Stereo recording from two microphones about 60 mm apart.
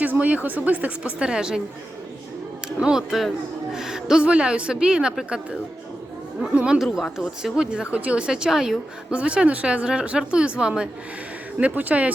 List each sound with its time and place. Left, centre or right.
0.0 s a woman's voice: right
1.3 s speech: centre
2.6 s a woman's voice: centre
7.2 s speech: centre
9.1 s a woman's voice: centre
11.5 s a woman's voice: right